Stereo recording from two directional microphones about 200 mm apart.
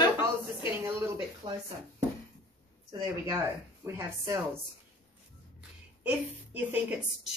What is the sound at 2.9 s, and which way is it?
Speech, 20° right (ahead or behind).